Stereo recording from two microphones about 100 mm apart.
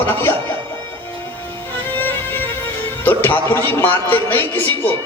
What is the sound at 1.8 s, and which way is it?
Music, 20° left (ahead or behind).